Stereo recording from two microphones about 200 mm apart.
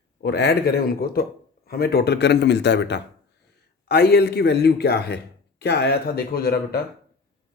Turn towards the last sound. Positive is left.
turn(degrees=50)  # may be behind; listen again after turning